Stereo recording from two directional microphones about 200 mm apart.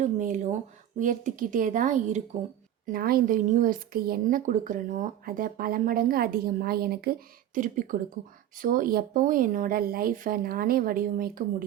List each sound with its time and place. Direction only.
0.0 s speech: 40° right (ahead or behind)
2.8 s a woman's voice: 45° right (ahead or behind)